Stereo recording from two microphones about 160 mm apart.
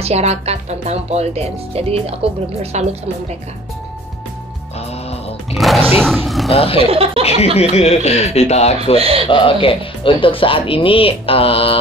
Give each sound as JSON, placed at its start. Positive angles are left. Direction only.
{"t": 0.0, "sound": "speech", "side_deg": -40}
{"t": 5.5, "sound": "speech", "side_deg": 0}
{"t": 6.5, "sound": "speech", "side_deg": 35}
{"t": 6.9, "sound": "speech", "side_deg": -35}
{"t": 7.5, "sound": "speech", "side_deg": 40}
{"t": 8.9, "sound": "speech", "side_deg": -35}
{"t": 9.3, "sound": "speech", "side_deg": 35}